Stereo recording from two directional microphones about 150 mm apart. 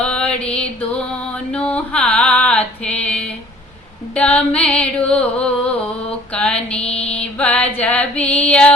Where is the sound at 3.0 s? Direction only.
10° left (ahead or behind).